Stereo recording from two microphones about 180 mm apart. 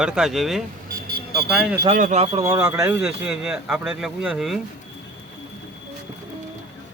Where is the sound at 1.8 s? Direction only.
45° right (ahead or behind).